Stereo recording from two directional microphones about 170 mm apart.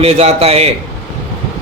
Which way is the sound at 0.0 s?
40° right (ahead or behind).